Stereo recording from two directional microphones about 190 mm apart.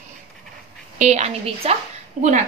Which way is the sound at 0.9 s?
35° right (ahead or behind).